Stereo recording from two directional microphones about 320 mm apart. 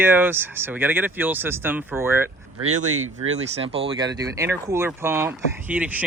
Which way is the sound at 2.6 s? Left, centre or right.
Right.